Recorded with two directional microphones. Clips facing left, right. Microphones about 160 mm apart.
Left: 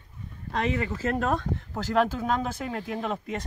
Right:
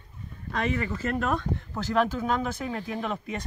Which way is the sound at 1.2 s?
35° left (ahead or behind).